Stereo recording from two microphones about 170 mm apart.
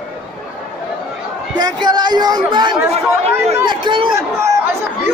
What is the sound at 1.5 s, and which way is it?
A man's voice, 25° right (ahead or behind).